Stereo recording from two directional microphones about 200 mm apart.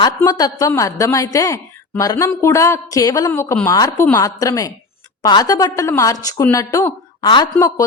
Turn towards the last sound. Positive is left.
turn(degrees=15)  # may be behind; listen again after turning